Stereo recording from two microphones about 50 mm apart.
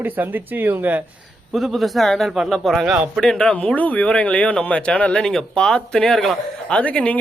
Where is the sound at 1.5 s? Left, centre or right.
Centre.